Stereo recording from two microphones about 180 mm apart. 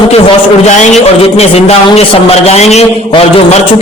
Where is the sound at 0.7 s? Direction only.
40° left (ahead or behind).